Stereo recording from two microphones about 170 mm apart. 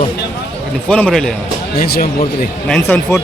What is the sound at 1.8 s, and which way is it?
Speech, 60° left (ahead or behind).